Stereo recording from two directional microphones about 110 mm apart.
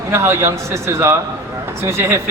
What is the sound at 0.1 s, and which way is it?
A man's voice, 20° right (ahead or behind).